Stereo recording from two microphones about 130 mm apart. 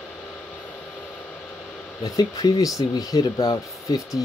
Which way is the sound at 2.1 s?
30° left (ahead or behind).